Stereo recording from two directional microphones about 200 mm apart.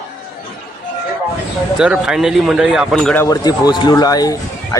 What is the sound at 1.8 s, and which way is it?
Speech, 5° right (ahead or behind).